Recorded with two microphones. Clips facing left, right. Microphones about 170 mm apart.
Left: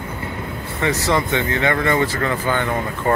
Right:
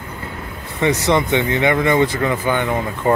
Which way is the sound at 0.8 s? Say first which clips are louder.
Right 3 dB; 20° right (ahead or behind).